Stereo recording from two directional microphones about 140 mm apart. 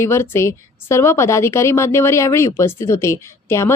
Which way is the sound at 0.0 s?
20° left (ahead or behind).